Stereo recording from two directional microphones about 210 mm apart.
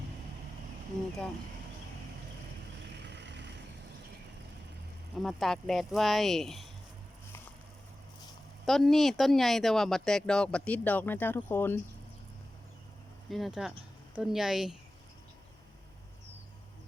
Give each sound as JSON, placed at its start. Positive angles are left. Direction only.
{"t": 3.0, "sound": "vehicle", "side_deg": -55}
{"t": 5.1, "sound": "speech", "side_deg": 0}
{"t": 8.6, "sound": "speech", "side_deg": 0}
{"t": 13.3, "sound": "speech", "side_deg": 0}